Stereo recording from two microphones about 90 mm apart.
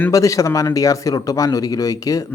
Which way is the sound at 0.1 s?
35° left (ahead or behind).